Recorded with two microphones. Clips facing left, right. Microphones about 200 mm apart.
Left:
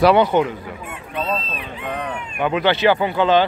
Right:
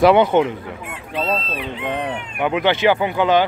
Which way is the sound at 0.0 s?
20° right (ahead or behind).